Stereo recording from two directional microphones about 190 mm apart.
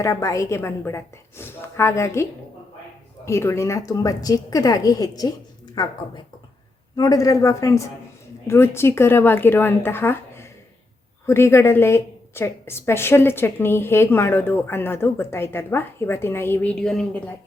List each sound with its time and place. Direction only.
0.0 s a woman's voice: 15° left (ahead or behind)
3.2 s a woman's voice: 15° left (ahead or behind)